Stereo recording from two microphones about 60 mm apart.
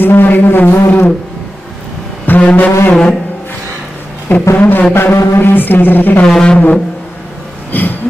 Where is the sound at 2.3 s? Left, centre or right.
Left.